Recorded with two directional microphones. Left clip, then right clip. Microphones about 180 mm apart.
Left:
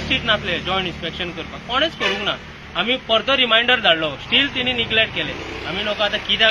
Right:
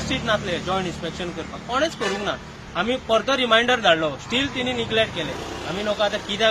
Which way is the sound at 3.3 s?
15° right (ahead or behind).